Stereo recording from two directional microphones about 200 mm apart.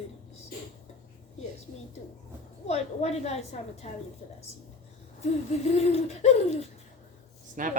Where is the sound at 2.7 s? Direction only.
30° left (ahead or behind).